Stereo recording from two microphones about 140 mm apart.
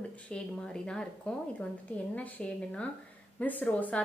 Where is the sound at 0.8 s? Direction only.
5° left (ahead or behind).